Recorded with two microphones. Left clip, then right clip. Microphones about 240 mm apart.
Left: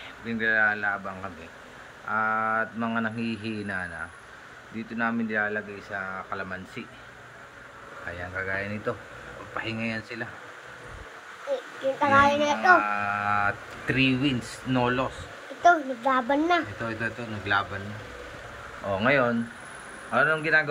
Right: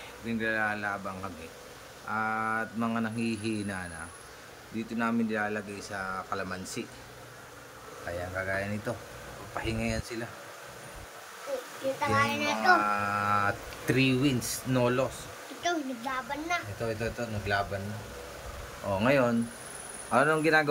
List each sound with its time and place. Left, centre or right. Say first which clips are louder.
0.3 s speech: left 7 dB; centre
8.4 s speech: left 3 dB; centre
12.1 s speech: left 8 dB; left
12.8 s speech: left 2 dB; centre
15.6 s speech: left 11 dB; left
16.8 s speech: left 2 dB; centre
18.9 s speech: left 3 dB; centre